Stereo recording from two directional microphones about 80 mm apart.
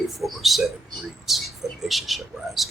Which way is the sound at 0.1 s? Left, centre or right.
Centre.